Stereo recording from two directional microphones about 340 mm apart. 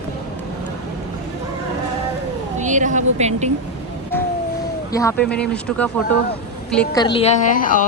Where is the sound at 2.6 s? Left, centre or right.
Right.